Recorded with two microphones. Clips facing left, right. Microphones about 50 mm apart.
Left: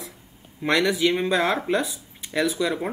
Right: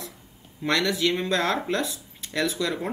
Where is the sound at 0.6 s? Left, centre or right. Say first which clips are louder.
Left 3 dB; centre.